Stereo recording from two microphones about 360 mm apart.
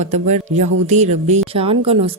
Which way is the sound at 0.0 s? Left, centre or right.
Centre.